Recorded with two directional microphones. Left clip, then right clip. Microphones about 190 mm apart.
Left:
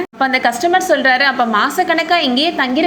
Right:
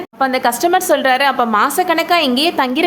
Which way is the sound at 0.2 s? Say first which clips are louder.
Even; 5° right (ahead or behind).